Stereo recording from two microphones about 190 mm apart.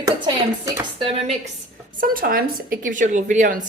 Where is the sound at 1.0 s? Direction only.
30° right (ahead or behind).